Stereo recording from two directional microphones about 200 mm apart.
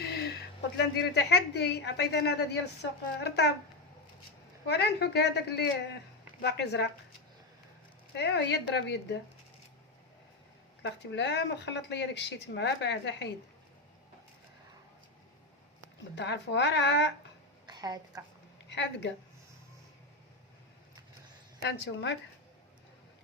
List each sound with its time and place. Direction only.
0.0 s a sound: 55° left (ahead or behind)
0.8 s speech: 55° left (ahead or behind)
4.6 s speech: 55° left (ahead or behind)
8.1 s speech: 60° left (ahead or behind)
10.8 s speech: 60° left (ahead or behind)
16.1 s speech: 60° left (ahead or behind)
17.7 s a woman's voice: 20° right (ahead or behind)
18.7 s speech: 60° left (ahead or behind)
21.6 s speech: 60° left (ahead or behind)